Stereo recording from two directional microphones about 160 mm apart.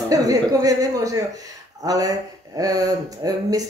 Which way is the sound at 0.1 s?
20° right (ahead or behind).